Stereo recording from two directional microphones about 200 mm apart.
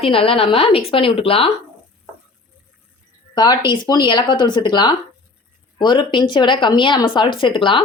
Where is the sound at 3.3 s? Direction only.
20° left (ahead or behind).